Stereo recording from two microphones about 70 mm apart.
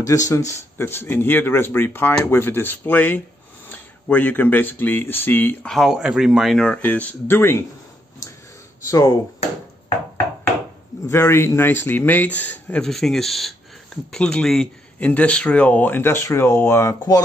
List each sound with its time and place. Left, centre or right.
0.0 s speech: left
5.8 s speech: centre
6.5 s speech: centre
6.8 s speech: left
7.2 s speech: left
8.8 s speech: left
11.1 s speech: left
12.8 s speech: centre
15.0 s speech: left